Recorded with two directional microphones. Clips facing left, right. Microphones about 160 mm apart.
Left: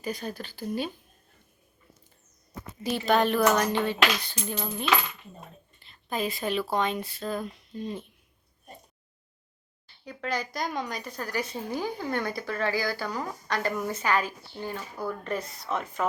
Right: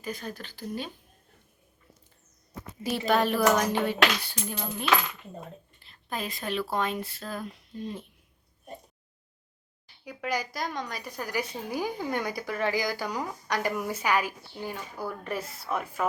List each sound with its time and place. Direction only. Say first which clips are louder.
0.2 s a woman's voice: left 3 dB; 30° left (ahead or behind)
0.4 s a woman's voice: left 5 dB; 10° left (ahead or behind)
3.1 s a sound: left 1 dB; 5° right (ahead or behind)
5.8 s speech: left 5 dB; centre (ahead or behind)
9.8 s speech: even; 10° right (ahead or behind)
10.7 s a sound: left 3 dB; 5° left (ahead or behind)
11.0 s speech: even; 10° right (ahead or behind)